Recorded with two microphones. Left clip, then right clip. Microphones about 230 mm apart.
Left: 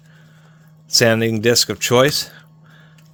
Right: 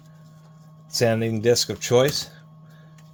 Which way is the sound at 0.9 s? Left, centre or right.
Left.